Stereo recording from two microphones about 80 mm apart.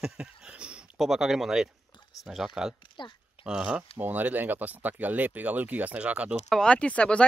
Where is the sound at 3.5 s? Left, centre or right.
Centre.